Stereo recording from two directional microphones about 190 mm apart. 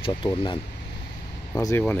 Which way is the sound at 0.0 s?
25° left (ahead or behind).